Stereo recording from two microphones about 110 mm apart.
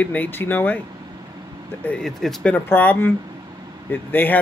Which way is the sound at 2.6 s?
20° left (ahead or behind).